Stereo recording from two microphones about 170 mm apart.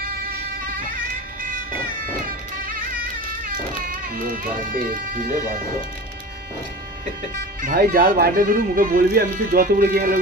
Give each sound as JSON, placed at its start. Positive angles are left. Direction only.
{"t": 0.0, "sound": "music", "side_deg": -60}
{"t": 3.8, "sound": "speech", "side_deg": -55}
{"t": 7.6, "sound": "speech", "side_deg": -60}